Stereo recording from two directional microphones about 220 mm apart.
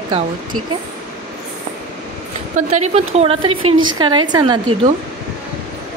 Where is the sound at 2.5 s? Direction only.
30° right (ahead or behind).